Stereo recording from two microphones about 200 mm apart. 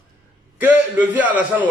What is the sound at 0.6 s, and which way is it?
A man's voice, 10° right (ahead or behind).